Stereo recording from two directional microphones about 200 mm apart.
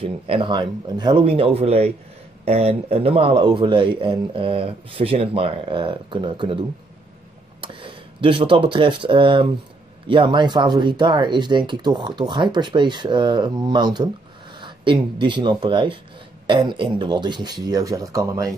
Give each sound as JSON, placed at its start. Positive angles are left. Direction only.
{"t": 0.0, "sound": "speech", "side_deg": -25}
{"t": 7.6, "sound": "speech", "side_deg": -25}